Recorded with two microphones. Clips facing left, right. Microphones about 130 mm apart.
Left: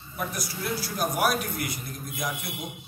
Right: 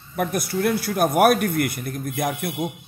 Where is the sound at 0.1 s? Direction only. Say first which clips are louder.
Right 9 dB; 60° right (ahead or behind).